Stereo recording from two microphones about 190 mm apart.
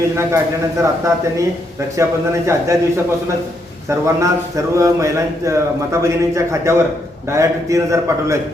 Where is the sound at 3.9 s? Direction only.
15° right (ahead or behind).